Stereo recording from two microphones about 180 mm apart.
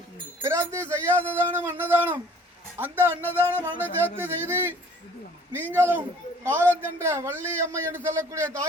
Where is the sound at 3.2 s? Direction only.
10° left (ahead or behind).